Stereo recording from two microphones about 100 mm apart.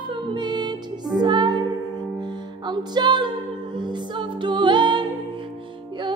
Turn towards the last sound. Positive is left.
turn(degrees=-50)  # may be behind; listen again after turning